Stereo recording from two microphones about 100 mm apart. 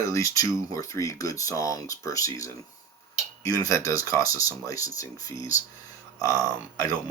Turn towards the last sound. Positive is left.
turn(degrees=35)  # may be behind; listen again after turning